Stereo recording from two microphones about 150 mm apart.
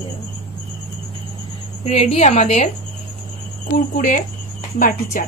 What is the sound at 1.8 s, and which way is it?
Speech, 45° left (ahead or behind).